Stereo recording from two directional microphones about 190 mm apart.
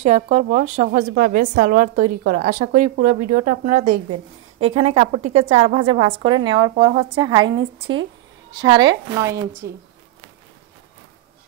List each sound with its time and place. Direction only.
0.0 s a woman's voice: 35° right (ahead or behind)
1.1 s a woman's voice: 50° right (ahead or behind)
4.6 s a woman's voice: 30° right (ahead or behind)
9.6 s speech: 55° right (ahead or behind)